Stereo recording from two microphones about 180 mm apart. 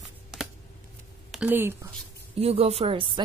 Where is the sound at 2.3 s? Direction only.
35° right (ahead or behind).